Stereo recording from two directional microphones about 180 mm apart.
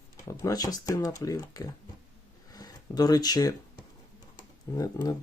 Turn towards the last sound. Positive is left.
turn(degrees=20)  # may be behind; listen again after turning